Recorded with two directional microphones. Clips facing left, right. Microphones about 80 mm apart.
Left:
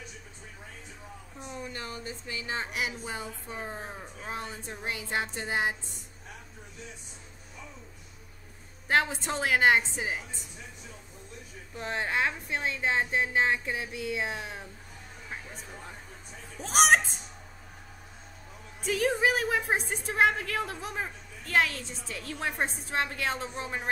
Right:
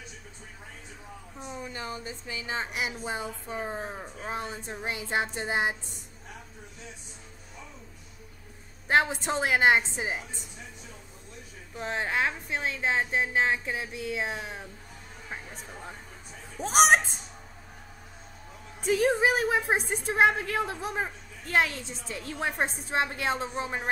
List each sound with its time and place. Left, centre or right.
1.4 s a woman's voice: centre
8.8 s a woman's voice: centre
11.7 s speech: centre
16.6 s speech: centre
19.0 s a woman's voice: centre
20.2 s a woman's voice: centre